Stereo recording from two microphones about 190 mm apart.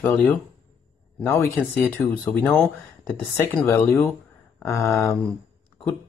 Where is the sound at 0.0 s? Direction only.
10° left (ahead or behind).